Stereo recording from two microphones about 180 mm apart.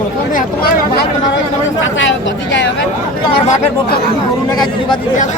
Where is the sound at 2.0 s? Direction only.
90° left.